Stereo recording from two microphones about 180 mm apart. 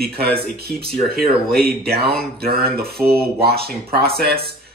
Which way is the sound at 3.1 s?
60° right (ahead or behind).